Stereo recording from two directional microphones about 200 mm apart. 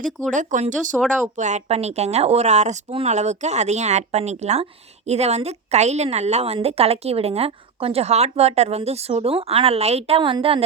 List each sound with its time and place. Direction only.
0.3 s a woman's voice: 40° right (ahead or behind)